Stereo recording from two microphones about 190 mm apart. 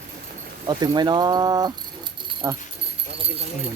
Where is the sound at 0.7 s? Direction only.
20° right (ahead or behind).